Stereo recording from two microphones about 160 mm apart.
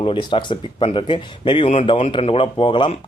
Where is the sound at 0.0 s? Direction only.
30° left (ahead or behind).